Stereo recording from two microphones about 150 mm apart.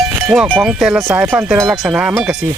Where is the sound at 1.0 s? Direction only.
20° right (ahead or behind).